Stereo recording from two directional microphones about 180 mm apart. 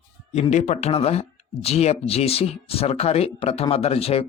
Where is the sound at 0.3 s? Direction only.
40° left (ahead or behind).